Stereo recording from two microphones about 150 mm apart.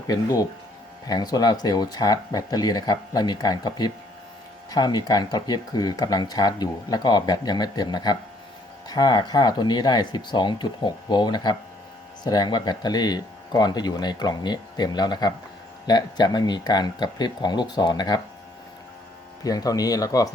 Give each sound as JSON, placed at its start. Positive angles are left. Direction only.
{"t": 0.1, "sound": "speech", "side_deg": 25}
{"t": 19.4, "sound": "speech", "side_deg": 25}